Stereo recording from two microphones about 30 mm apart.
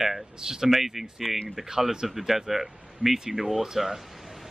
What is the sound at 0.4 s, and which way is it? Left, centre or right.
Speech, centre.